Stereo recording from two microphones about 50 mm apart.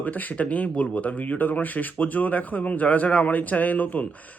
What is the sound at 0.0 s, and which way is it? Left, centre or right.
Speech, left.